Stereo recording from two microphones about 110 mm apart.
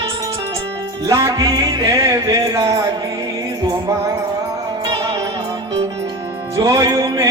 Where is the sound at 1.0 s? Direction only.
30° right (ahead or behind).